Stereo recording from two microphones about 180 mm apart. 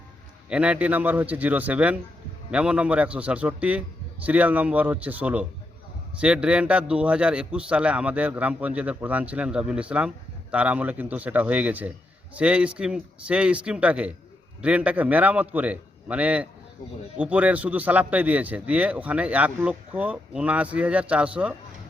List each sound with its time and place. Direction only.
0.5 s a man's voice: 5° right (ahead or behind)